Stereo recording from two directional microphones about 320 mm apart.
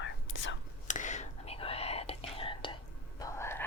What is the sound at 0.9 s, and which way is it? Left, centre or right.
Whispering, left.